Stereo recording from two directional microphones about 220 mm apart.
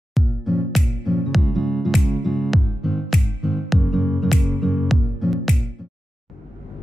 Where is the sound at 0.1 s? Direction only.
Centre (ahead or behind).